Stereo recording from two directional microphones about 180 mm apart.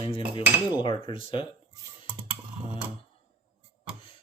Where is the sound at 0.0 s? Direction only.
30° left (ahead or behind).